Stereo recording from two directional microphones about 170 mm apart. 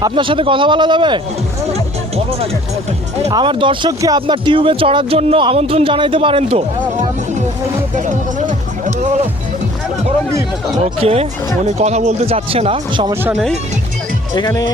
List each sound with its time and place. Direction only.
0.0 s speech: 30° right (ahead or behind)
3.3 s speech: 30° right (ahead or behind)
8.0 s speech: 45° right (ahead or behind)
11.0 s speech: 35° right (ahead or behind)
13.2 s speech: centre (ahead or behind)
14.3 s speech: 25° left (ahead or behind)